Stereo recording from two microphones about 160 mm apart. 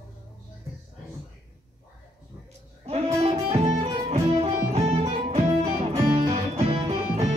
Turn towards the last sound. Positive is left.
turn(degrees=-45)  # may be behind; listen again after turning